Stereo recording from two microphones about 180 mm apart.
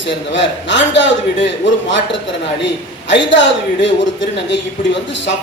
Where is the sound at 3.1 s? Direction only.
85° left.